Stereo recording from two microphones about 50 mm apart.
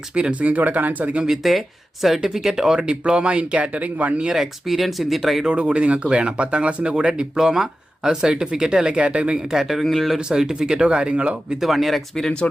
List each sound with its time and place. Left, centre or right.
0.2 s speech: right
1.2 s speech: centre; by 4.2 s right
4.3 s speech: centre
5.5 s speech: right
9.0 s speech: right
9.5 s speech: centre
9.8 s speech: centre
10.2 s speech: centre
11.6 s speech: centre